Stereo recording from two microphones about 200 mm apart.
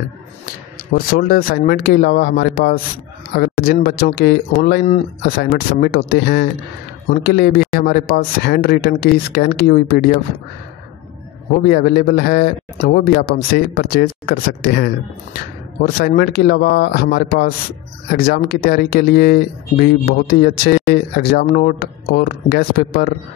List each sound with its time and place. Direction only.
0.9 s a man's voice: 45° left (ahead or behind)
4.8 s a man's voice: 40° left (ahead or behind)
11.5 s a man's voice: 50° left (ahead or behind)
16.0 s a man's voice: 50° left (ahead or behind)